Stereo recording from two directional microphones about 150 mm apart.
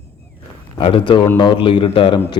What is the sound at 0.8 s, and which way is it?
A man's voice, 35° left (ahead or behind).